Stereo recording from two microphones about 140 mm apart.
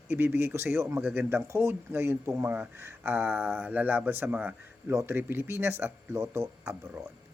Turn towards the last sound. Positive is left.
turn(degrees=-20)  # may be behind; listen again after turning